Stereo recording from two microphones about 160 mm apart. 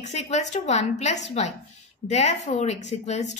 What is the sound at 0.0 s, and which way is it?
A woman's voice, 45° left (ahead or behind).